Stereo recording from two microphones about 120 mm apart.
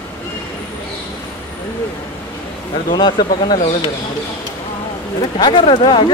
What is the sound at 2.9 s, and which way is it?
Speech, 35° left (ahead or behind).